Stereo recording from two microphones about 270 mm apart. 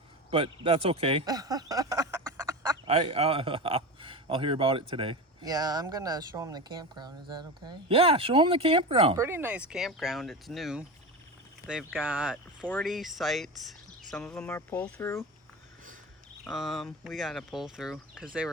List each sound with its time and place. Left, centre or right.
0.3 s speech: centre
16.4 s speech: centre